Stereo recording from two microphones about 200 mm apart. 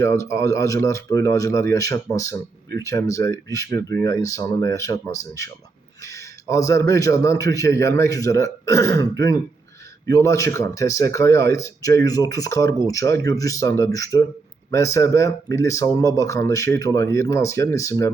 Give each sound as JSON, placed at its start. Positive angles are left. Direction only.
{"t": 0.0, "sound": "speech", "side_deg": 15}
{"t": 6.5, "sound": "speech", "side_deg": 15}